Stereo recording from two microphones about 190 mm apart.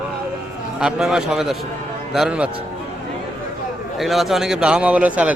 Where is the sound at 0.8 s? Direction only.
5° right (ahead or behind).